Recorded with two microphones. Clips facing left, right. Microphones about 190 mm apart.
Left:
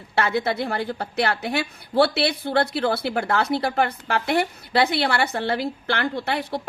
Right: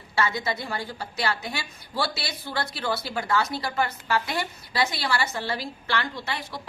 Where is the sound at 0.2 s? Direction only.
60° left (ahead or behind).